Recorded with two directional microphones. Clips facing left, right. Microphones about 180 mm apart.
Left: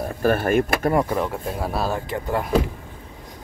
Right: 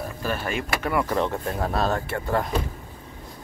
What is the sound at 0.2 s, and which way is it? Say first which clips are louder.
Speech: left 10 dB; 50° left (ahead or behind).